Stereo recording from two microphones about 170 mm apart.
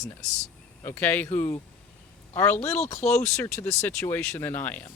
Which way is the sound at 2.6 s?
40° left (ahead or behind).